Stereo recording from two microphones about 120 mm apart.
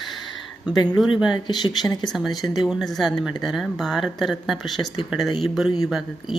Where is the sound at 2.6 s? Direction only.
Centre (ahead or behind).